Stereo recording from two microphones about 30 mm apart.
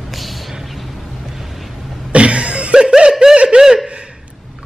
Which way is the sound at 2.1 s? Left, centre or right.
Right.